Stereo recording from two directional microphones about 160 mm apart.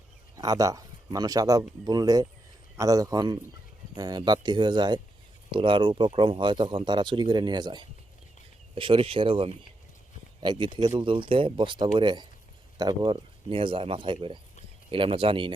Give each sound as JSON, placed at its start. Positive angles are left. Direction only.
{"t": 0.3, "sound": "speech", "side_deg": -20}